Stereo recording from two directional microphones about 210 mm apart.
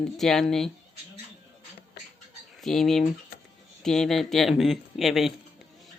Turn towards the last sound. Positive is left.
turn(degrees=0)  # may be behind; listen again after turning